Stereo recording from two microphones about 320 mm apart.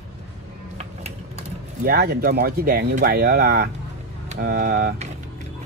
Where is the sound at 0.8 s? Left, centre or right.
Right.